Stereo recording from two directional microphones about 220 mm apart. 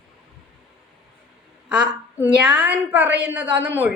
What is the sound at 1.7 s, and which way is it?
A woman's voice, 5° right (ahead or behind).